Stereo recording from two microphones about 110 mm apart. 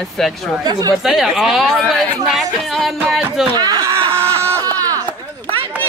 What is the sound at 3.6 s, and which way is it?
Speech, 35° right (ahead or behind).